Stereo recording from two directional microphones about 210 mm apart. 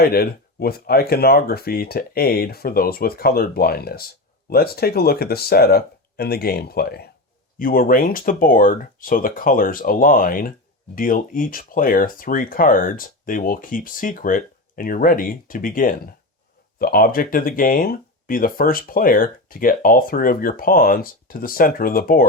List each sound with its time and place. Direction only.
0.0 s speech: 45° left (ahead or behind)